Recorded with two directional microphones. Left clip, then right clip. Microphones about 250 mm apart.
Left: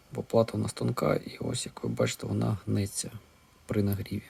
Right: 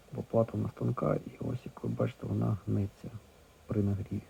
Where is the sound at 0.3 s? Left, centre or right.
Left.